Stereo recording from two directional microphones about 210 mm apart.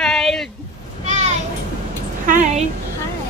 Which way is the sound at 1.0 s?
35° right (ahead or behind).